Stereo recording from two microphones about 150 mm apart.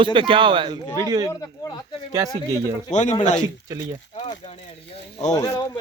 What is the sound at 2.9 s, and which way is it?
Speech, 50° left (ahead or behind).